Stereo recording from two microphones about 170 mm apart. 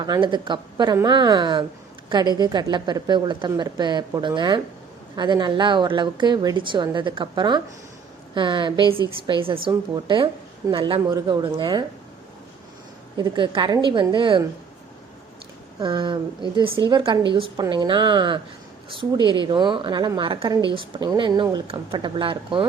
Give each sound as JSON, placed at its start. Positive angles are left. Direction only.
{"t": 0.0, "sound": "a woman's voice", "side_deg": -25}
{"t": 13.1, "sound": "a woman's voice", "side_deg": -25}
{"t": 15.8, "sound": "a woman's voice", "side_deg": -25}